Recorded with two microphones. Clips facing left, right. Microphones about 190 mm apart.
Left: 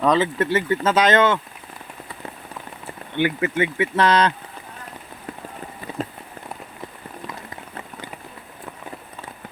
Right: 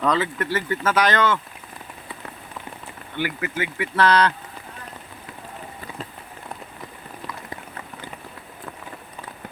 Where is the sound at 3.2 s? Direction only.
20° left (ahead or behind).